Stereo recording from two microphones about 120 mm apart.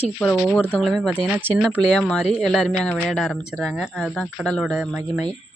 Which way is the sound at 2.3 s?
5° left (ahead or behind).